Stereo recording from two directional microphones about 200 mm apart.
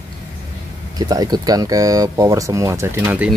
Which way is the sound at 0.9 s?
20° right (ahead or behind).